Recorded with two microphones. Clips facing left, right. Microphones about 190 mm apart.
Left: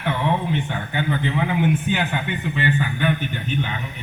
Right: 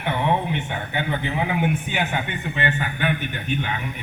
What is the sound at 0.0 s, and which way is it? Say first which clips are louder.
A man's voice: even; 55° right (ahead or behind).